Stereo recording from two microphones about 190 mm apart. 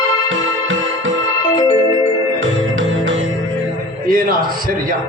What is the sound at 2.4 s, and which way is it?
Music, 90° right.